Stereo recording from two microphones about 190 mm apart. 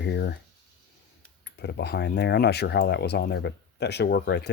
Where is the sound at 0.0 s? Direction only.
65° left (ahead or behind).